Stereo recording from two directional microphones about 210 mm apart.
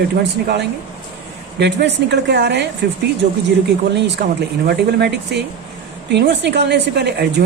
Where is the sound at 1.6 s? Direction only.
55° right (ahead or behind).